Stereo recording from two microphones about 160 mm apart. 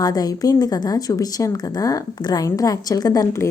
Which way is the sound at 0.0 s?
25° left (ahead or behind).